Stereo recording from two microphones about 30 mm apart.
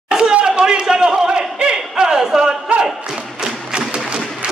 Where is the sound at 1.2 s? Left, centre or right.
Right.